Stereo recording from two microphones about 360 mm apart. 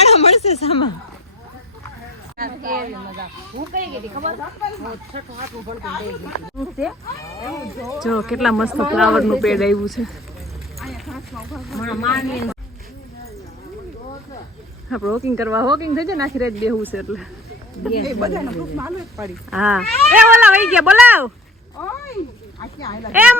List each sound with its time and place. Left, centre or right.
0.0 s a sound: centre
2.4 s speech: right
6.6 s speech: centre
14.8 s speech: centre
22.6 s speech: centre
23.1 s speech: centre